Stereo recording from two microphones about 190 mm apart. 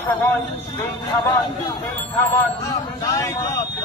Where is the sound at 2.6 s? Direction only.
20° left (ahead or behind).